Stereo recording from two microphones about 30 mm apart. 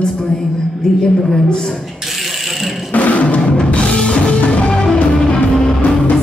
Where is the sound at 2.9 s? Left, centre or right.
Left.